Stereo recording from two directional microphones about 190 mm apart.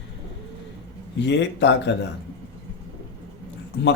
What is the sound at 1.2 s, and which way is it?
Speech, 70° left (ahead or behind).